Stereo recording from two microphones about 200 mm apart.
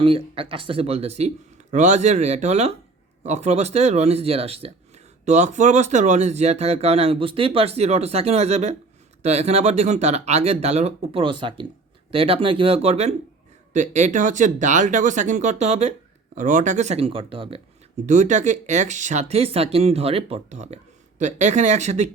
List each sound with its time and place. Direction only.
0.0 s speech: 25° right (ahead or behind)